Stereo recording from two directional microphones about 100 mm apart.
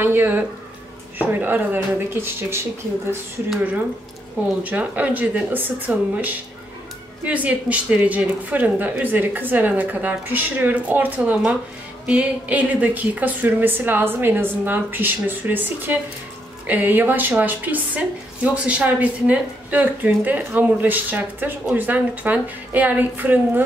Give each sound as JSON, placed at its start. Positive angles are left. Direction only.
{"t": 0.0, "sound": "a woman's voice", "side_deg": -20}
{"t": 4.6, "sound": "a woman's voice", "side_deg": -15}